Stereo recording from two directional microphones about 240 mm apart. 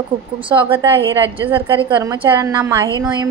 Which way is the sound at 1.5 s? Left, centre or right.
Right.